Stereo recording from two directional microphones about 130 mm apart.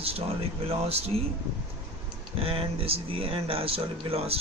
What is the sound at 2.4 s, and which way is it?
Speech, 45° right (ahead or behind).